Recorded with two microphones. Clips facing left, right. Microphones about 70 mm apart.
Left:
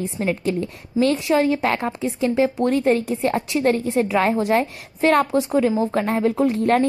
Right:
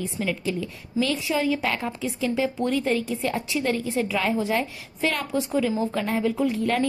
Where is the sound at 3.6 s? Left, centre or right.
Left.